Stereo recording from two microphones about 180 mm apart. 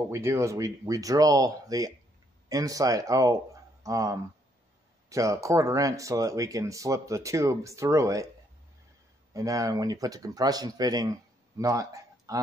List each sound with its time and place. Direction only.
0.1 s speech: 15° right (ahead or behind)
9.3 s speech: 20° right (ahead or behind)